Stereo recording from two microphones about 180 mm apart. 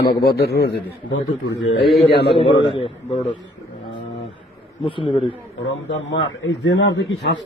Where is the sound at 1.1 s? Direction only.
90° left.